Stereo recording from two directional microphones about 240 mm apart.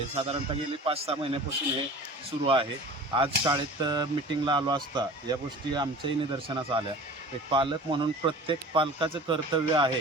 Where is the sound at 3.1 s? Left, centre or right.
Centre.